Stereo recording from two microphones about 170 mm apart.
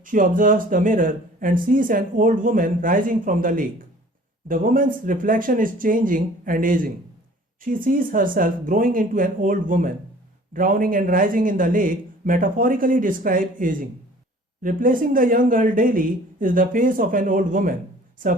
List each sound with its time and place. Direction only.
0.0 s speech: 50° right (ahead or behind)